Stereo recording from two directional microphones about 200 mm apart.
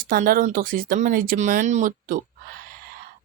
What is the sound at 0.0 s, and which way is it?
Speech, 45° right (ahead or behind).